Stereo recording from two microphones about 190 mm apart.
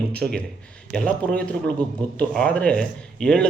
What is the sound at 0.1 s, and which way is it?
Speech, 5° left (ahead or behind).